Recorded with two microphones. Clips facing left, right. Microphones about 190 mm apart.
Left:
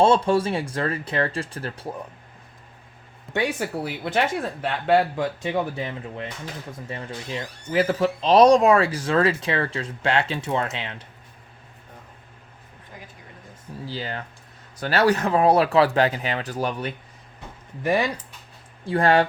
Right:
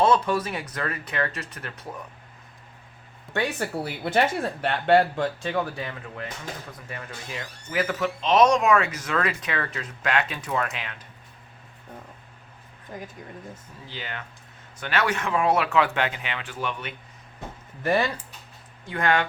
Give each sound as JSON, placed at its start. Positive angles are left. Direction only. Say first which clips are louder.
{"t": 0.0, "sound": "speech", "louder": "left 3 dB", "side_deg": 30}
{"t": 3.3, "sound": "a sound", "louder": "left 2 dB", "side_deg": 0}
{"t": 3.6, "sound": "speech", "louder": "left 1 dB", "side_deg": 0}
{"t": 5.4, "sound": "speech", "louder": "left 2 dB", "side_deg": 20}
{"t": 13.8, "sound": "speech", "louder": "left 6 dB", "side_deg": 35}
{"t": 17.8, "sound": "speech", "louder": "left 1 dB", "side_deg": 15}
{"t": 18.9, "sound": "speech", "louder": "left 5 dB", "side_deg": 35}